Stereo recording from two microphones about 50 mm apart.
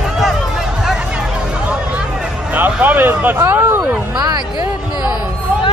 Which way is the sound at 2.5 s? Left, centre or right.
Right.